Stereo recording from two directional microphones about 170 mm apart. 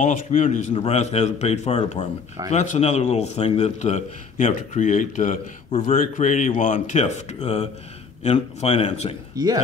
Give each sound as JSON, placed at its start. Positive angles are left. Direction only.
{"t": 0.0, "sound": "a man's voice", "side_deg": 45}
{"t": 9.4, "sound": "speech", "side_deg": -20}